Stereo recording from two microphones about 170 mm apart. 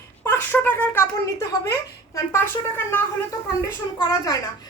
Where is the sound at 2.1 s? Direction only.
15° left (ahead or behind).